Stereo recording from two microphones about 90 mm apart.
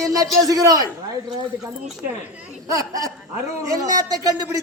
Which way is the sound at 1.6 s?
5° right (ahead or behind).